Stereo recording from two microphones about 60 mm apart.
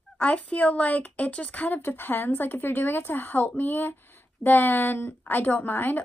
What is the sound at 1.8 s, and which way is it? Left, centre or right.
Speech, left.